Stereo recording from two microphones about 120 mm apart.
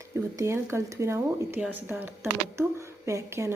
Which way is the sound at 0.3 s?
25° right (ahead or behind).